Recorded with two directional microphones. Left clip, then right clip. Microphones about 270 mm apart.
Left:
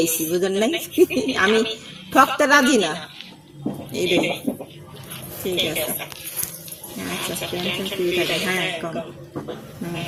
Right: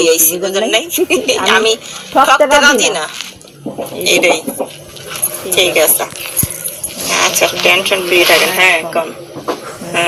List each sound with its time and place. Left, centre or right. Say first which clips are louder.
0.0 s a woman's voice: right 10 dB; left
7.1 s a woman's voice: right 16 dB; left